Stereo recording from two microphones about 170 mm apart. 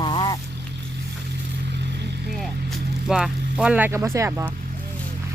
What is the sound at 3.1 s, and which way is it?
Speech, 5° right (ahead or behind).